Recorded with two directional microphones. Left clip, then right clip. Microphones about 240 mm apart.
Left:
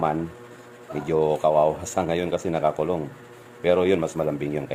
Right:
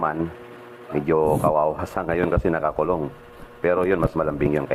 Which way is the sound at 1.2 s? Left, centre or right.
Centre.